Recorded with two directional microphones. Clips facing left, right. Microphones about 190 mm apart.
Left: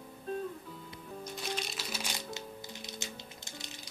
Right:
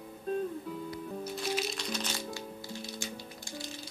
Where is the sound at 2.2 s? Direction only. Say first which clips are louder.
Right 3 dB; 20° left (ahead or behind).